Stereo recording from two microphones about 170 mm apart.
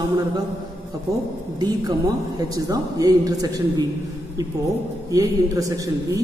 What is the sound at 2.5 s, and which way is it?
A man's voice, 20° right (ahead or behind).